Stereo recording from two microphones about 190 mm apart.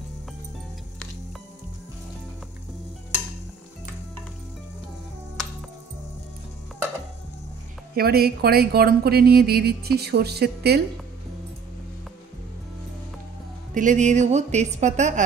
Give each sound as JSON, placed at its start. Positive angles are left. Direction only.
{"t": 7.9, "sound": "speech", "side_deg": -55}
{"t": 13.7, "sound": "a woman's voice", "side_deg": -40}